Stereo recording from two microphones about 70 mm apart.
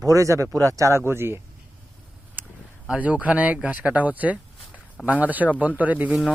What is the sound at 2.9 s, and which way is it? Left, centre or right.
Speech, centre.